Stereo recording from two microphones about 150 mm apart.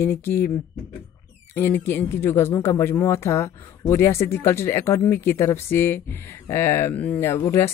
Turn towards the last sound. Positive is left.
turn(degrees=15)  # may be behind; listen again after turning